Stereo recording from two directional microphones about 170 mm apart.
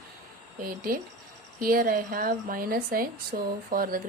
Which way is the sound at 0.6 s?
60° right (ahead or behind).